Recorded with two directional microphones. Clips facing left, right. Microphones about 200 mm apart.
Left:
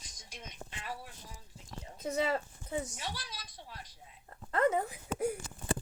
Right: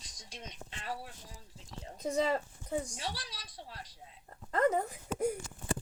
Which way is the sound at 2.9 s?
30° right (ahead or behind).